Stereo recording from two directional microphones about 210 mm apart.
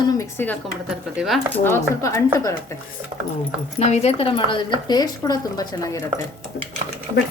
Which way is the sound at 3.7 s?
30° left (ahead or behind).